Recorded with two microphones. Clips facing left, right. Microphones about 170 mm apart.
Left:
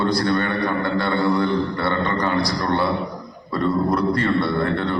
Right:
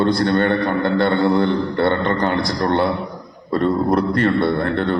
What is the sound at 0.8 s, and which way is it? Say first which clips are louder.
A man's voice: right 5 dB; 55° right (ahead or behind).